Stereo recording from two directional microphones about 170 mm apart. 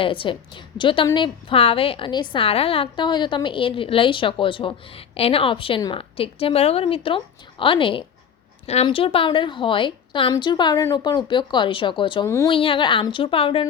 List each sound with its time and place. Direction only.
0.0 s a woman's voice: 30° left (ahead or behind)